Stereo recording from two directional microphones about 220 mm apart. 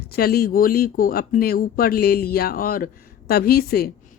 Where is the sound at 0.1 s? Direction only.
45° left (ahead or behind).